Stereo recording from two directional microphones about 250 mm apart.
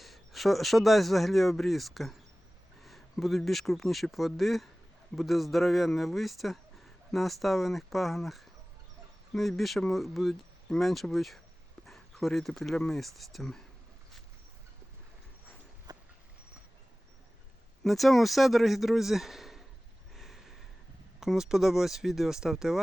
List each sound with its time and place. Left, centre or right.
0.0 s speech: centre
15.9 s vehicle: centre
17.8 s speech: centre
20.1 s a sound: centre
21.2 s speech: centre